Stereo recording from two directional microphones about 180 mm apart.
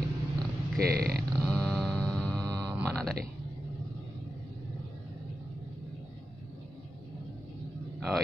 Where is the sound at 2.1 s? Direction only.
5° left (ahead or behind).